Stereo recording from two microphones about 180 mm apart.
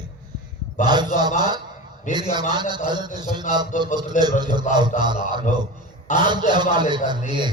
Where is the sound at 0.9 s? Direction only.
25° right (ahead or behind).